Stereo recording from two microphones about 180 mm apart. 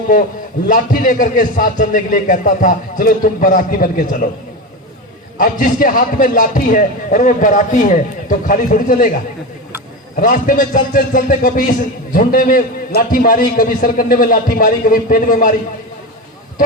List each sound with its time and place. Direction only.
0.7 s a man's voice: 50° left (ahead or behind)
5.4 s a man's voice: 50° left (ahead or behind)
10.2 s a man's voice: 50° left (ahead or behind)